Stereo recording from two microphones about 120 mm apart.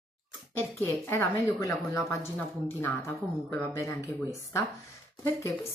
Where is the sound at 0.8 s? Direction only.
20° left (ahead or behind).